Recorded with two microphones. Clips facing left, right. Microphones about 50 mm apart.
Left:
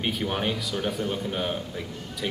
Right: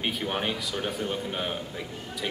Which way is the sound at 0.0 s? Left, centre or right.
Centre.